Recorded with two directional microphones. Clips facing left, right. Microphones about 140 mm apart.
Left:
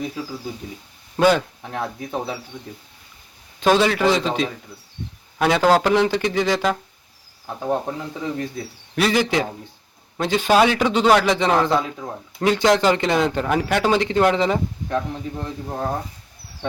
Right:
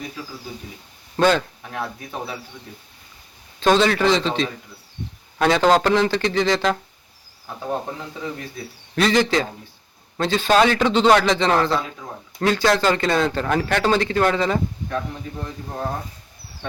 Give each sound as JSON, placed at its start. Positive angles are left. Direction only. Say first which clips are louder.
{"t": 1.1, "sound": "speech", "louder": "left 1 dB", "side_deg": 10}
{"t": 3.6, "sound": "a man's voice", "louder": "even", "side_deg": 10}
{"t": 9.0, "sound": "a man's voice", "louder": "right 1 dB", "side_deg": 10}